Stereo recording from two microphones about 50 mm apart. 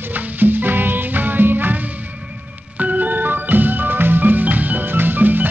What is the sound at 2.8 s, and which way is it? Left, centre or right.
Music, right.